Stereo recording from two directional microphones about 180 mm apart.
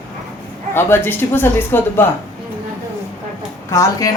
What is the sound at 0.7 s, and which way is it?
A woman's voice, 15° left (ahead or behind).